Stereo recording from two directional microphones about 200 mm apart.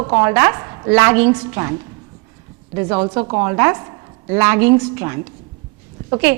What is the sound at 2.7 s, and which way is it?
A woman's voice, 20° right (ahead or behind).